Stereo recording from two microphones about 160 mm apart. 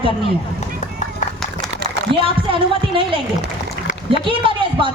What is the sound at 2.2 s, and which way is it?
Speech, 35° right (ahead or behind).